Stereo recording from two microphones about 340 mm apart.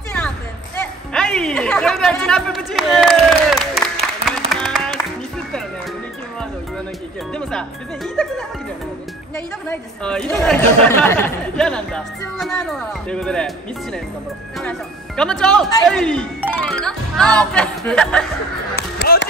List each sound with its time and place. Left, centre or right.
0.7 s chatter: centre
4.2 s music: centre
7.3 s music: centre
9.7 s speech: centre
14.6 s speech: centre
18.8 s music: left